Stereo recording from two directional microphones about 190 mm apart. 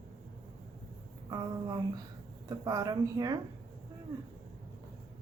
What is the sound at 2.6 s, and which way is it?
Speech, 20° right (ahead or behind).